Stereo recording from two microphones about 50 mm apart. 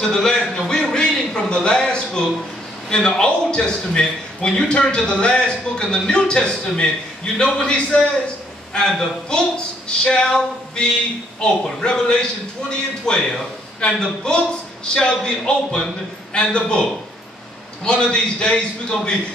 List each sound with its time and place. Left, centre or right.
0.0 s a man's voice: centre
11.4 s a man's voice: centre
17.8 s a man's voice: centre